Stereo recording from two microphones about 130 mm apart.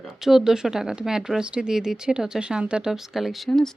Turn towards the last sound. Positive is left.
turn(degrees=5)  # may be behind; listen again after turning